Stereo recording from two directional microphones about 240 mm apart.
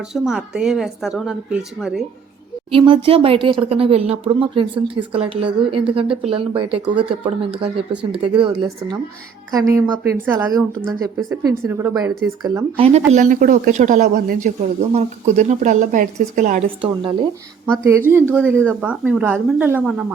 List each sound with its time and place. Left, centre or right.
0.1 s a woman's voice: centre
2.7 s a woman's voice: right
17.7 s a woman's voice: centre